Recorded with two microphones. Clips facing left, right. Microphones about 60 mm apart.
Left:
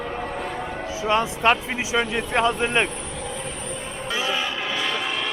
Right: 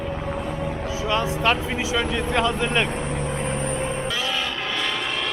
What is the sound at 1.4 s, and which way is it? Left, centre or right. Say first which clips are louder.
Speech: left 1 dB; left.